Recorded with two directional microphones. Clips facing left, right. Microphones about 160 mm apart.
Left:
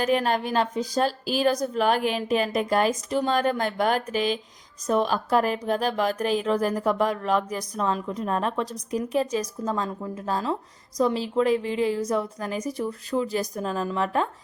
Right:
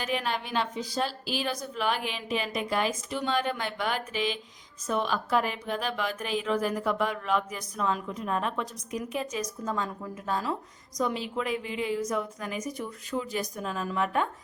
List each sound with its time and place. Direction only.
0.0 s a woman's voice: 45° left (ahead or behind)